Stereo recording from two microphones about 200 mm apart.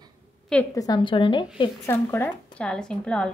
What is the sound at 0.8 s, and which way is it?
Speech, 20° left (ahead or behind).